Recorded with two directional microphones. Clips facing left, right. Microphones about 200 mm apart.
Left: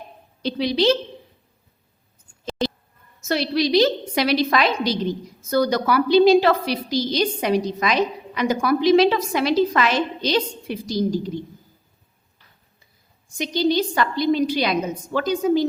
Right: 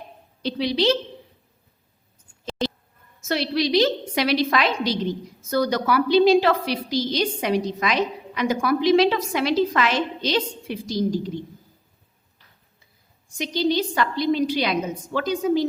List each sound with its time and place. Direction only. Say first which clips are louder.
0.4 s a woman's voice: left 2 dB; 45° left (ahead or behind)
3.2 s a woman's voice: left 2 dB; 40° left (ahead or behind)
13.4 s a woman's voice: left 2 dB; 45° left (ahead or behind)